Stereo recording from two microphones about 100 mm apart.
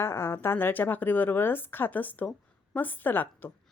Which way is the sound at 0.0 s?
25° left (ahead or behind).